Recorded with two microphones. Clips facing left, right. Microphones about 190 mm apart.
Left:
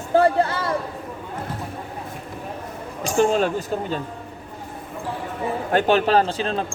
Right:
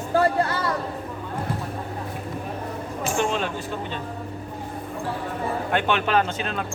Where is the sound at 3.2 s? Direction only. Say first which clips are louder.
Left 8 dB; 40° left (ahead or behind).